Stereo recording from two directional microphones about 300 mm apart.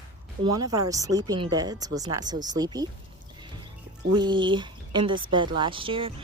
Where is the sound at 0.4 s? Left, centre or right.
Centre.